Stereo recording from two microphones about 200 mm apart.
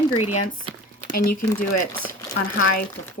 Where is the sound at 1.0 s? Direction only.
40° left (ahead or behind).